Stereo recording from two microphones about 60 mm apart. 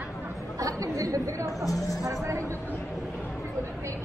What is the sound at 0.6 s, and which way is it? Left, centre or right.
Speech, right.